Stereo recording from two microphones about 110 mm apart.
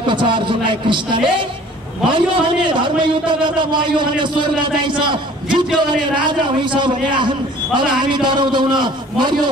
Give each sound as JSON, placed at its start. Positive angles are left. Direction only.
{"t": 0.0, "sound": "a man's voice", "side_deg": -50}